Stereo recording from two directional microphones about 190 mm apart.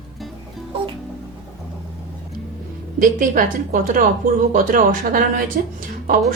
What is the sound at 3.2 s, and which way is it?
Speech, 45° right (ahead or behind).